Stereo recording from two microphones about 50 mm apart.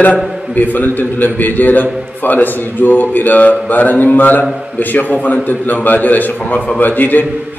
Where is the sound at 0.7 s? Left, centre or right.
Left.